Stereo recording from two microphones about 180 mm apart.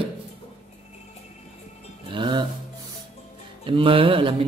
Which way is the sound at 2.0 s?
25° right (ahead or behind).